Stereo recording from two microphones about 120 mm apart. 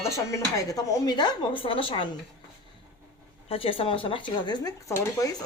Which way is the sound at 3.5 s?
50° left (ahead or behind).